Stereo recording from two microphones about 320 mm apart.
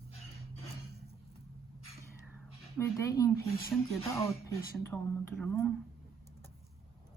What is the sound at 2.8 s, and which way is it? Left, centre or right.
Speech, centre.